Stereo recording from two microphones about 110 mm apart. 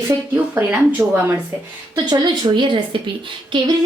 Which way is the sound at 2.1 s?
45° right (ahead or behind).